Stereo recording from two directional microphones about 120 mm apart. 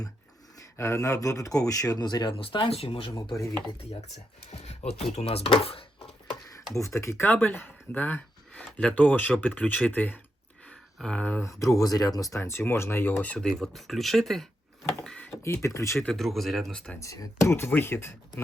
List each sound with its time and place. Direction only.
0.8 s speech: 25° left (ahead or behind); by 3.1 s 50° left (ahead or behind)
4.6 s speech: 65° left (ahead or behind)
6.7 s speech: 25° left (ahead or behind)
11.4 s speech: 25° left (ahead or behind); by 14.4 s centre (ahead or behind)
15.0 s a sound: 5° left (ahead or behind)
15.3 s speech: 25° left (ahead or behind)
16.0 s speech: centre (ahead or behind)
17.0 s speech: 25° left (ahead or behind)